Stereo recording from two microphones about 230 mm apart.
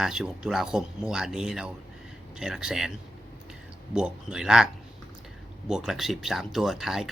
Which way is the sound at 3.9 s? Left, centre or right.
Centre.